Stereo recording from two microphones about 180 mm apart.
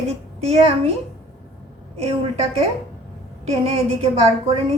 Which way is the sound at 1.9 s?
35° right (ahead or behind).